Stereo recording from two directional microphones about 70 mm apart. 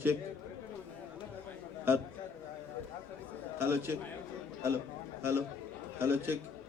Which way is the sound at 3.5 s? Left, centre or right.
Right.